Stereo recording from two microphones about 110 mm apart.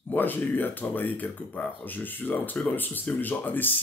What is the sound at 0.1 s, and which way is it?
Speech, 15° left (ahead or behind).